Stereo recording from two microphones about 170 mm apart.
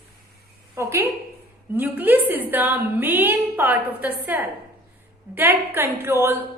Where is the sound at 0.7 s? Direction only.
15° right (ahead or behind).